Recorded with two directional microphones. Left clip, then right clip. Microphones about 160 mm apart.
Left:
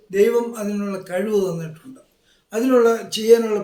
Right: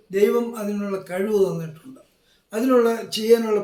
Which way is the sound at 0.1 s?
20° left (ahead or behind).